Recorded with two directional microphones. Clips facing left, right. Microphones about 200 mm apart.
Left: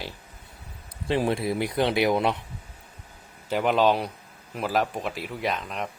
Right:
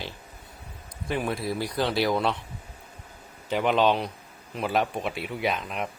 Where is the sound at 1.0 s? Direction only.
25° left (ahead or behind).